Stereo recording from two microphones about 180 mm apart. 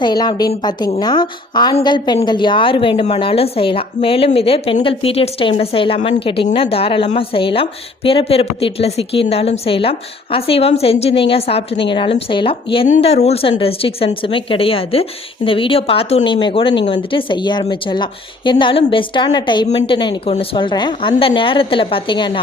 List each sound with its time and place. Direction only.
0.0 s a woman's voice: 25° left (ahead or behind)